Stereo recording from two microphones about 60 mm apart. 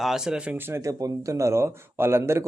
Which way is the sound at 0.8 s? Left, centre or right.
Right.